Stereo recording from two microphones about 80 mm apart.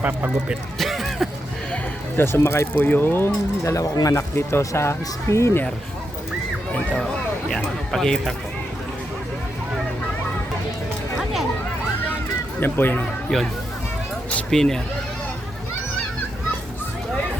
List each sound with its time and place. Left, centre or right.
0.0 s speech: centre
0.8 s a sound: centre
2.1 s speech: left
4.4 s speech: left
7.4 s speech: centre
12.5 s speech: left
13.3 s speech: centre
14.3 s a sound: centre